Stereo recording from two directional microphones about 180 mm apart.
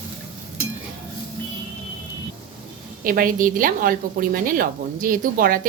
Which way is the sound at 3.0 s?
50° right (ahead or behind).